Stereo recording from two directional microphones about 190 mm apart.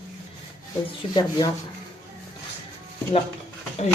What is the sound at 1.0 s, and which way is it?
Speech, 25° left (ahead or behind).